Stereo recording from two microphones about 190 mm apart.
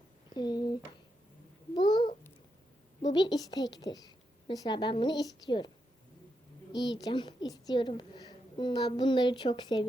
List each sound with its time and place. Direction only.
0.3 s a woman's voice: 20° left (ahead or behind)
1.7 s babbling: 25° left (ahead or behind)
3.1 s a woman's voice: 20° left (ahead or behind)
6.7 s a woman's voice: 20° left (ahead or behind)